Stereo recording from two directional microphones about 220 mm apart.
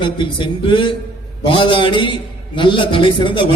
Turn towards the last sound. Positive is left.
turn(degrees=20)  # may be behind; listen again after turning